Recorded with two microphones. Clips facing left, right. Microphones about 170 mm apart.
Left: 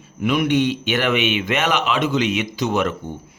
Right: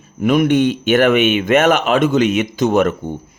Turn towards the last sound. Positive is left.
turn(degrees=-50)  # may be behind; listen again after turning